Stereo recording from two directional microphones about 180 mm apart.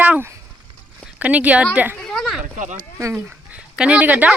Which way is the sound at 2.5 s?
40° right (ahead or behind).